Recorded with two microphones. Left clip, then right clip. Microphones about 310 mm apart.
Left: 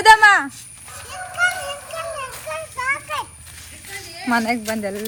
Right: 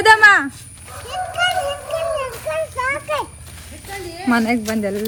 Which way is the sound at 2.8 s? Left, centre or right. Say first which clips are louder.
Left 1 dB; centre.